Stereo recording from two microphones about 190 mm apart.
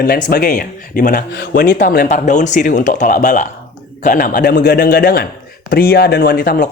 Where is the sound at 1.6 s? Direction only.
45° left (ahead or behind).